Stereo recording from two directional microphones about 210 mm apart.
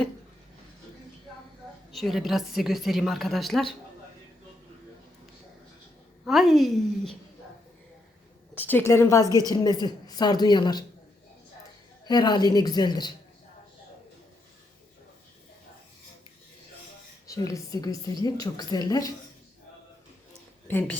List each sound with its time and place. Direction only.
1.9 s a woman's voice: centre (ahead or behind)
6.2 s a woman's voice: centre (ahead or behind)
8.5 s a woman's voice: 10° left (ahead or behind)
12.0 s a woman's voice: 20° left (ahead or behind)
17.2 s a woman's voice: 15° left (ahead or behind)
20.7 s a woman's voice: 10° left (ahead or behind)